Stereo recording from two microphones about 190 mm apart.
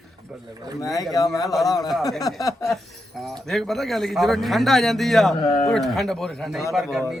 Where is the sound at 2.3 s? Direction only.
20° left (ahead or behind).